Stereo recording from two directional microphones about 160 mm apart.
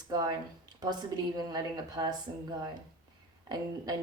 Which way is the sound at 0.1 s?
25° right (ahead or behind).